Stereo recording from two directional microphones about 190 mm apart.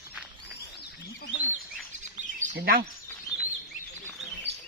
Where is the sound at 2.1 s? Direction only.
40° right (ahead or behind).